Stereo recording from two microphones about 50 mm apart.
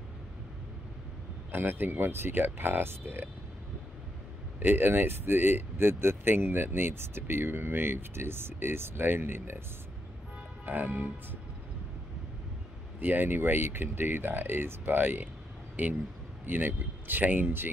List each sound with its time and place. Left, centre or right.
1.5 s speech: right
4.6 s speech: right
10.6 s speech: right
13.0 s speech: right